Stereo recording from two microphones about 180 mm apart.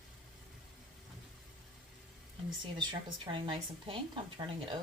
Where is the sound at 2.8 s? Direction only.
25° right (ahead or behind).